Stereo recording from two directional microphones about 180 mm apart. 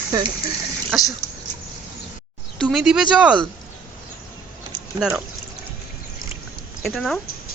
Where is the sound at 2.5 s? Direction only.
5° right (ahead or behind).